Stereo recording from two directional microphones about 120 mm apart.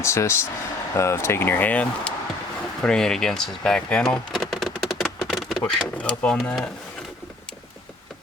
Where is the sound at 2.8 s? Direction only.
5° left (ahead or behind).